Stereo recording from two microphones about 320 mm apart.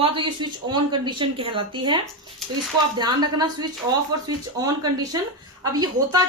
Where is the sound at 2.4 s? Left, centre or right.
Centre.